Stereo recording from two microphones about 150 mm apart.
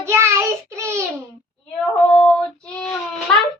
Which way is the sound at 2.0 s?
5° left (ahead or behind).